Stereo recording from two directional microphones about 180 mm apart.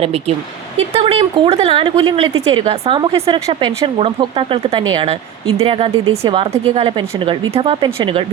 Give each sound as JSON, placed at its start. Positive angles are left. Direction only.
{"t": 0.0, "sound": "speech", "side_deg": -35}